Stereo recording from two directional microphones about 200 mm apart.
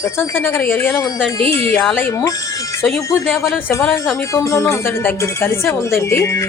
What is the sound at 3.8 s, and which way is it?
Speech, 10° left (ahead or behind).